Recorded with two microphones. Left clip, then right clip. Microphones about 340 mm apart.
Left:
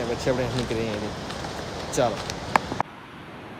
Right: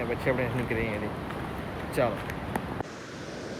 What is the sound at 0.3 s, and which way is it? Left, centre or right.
Speech, centre.